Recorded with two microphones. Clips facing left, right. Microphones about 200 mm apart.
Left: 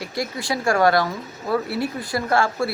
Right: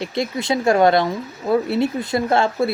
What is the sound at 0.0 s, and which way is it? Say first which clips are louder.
Speech: right 4 dB; 25° right (ahead or behind).